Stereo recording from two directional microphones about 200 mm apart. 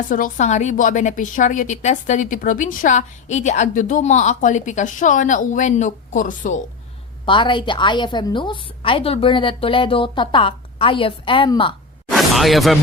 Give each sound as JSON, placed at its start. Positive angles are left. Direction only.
{"t": 0.1, "sound": "a woman's voice", "side_deg": 40}
{"t": 7.3, "sound": "a woman's voice", "side_deg": 25}
{"t": 12.1, "sound": "a sound", "side_deg": 0}